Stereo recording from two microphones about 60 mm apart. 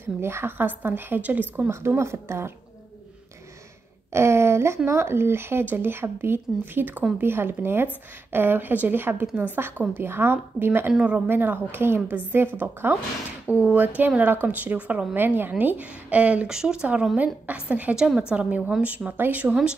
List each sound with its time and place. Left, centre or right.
0.2 s speech: right
1.7 s a woman's voice: right
4.1 s a woman's voice: right
10.9 s speech: centre
11.2 s speech: right
16.4 s a woman's voice: centre
17.9 s a woman's voice: centre; by 19.5 s right